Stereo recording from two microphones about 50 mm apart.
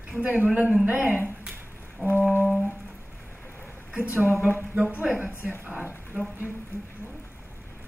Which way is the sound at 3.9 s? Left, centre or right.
Right.